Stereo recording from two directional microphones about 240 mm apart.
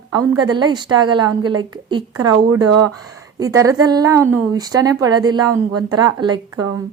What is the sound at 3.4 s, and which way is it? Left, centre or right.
A woman's voice, centre.